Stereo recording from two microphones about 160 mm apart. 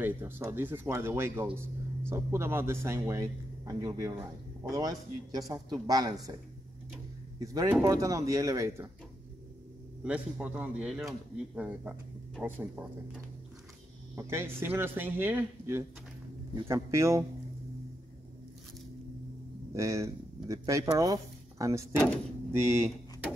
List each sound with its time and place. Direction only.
0.0 s a man's voice: 15° right (ahead or behind)
7.3 s a man's voice: 25° right (ahead or behind)
10.0 s speech: 10° right (ahead or behind)
14.1 s a man's voice: 15° right (ahead or behind)
19.7 s speech: 20° right (ahead or behind)